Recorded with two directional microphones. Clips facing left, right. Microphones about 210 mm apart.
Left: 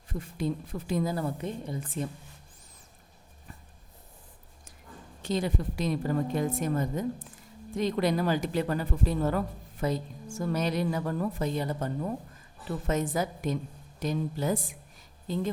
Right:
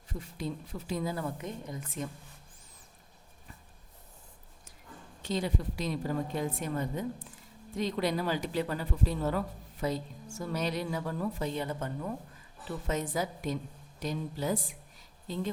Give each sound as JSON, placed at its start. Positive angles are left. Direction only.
{"t": 0.1, "sound": "a woman's voice", "side_deg": 50}
{"t": 1.1, "sound": "a woman's voice", "side_deg": 30}
{"t": 5.2, "sound": "a woman's voice", "side_deg": 50}
{"t": 12.9, "sound": "a woman's voice", "side_deg": 50}